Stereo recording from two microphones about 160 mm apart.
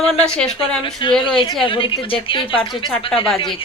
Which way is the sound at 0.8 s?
30° left (ahead or behind).